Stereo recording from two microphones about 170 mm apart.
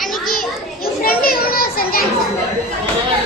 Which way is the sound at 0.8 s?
60° left (ahead or behind).